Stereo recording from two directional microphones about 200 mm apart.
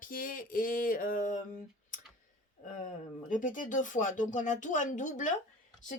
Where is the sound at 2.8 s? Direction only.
40° left (ahead or behind).